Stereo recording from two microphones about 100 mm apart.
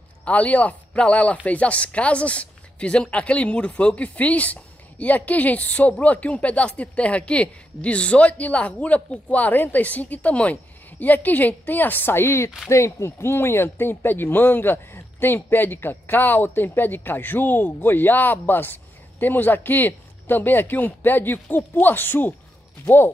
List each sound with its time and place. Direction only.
0.2 s speech: 15° left (ahead or behind)